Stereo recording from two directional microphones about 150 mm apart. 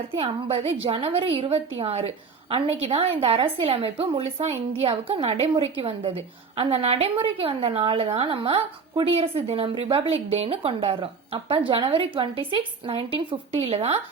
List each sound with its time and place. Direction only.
0.1 s a woman's voice: 35° right (ahead or behind)